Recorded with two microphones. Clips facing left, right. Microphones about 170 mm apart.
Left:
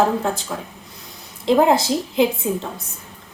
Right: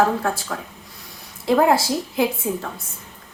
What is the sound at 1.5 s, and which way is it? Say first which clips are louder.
A woman's voice: left 2 dB; 20° left (ahead or behind).